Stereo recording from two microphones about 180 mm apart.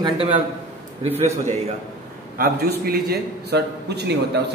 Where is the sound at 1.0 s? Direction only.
35° right (ahead or behind).